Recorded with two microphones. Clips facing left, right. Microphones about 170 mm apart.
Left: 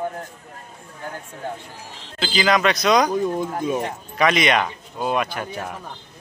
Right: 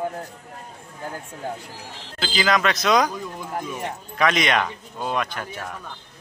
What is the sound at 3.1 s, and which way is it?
Speech, 50° left (ahead or behind).